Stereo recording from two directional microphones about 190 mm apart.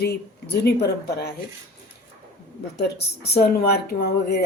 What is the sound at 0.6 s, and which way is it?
Speech, 60° left (ahead or behind).